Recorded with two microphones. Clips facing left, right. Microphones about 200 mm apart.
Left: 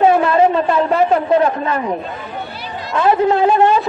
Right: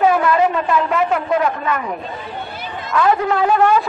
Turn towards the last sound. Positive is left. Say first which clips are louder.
# left 2 dB
turn(degrees=25)  # may be behind; listen again after turning